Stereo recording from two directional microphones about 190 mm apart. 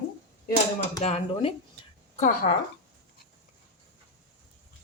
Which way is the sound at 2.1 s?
40° left (ahead or behind).